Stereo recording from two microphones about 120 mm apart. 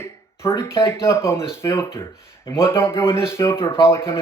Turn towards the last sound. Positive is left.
turn(degrees=20)  # may be behind; listen again after turning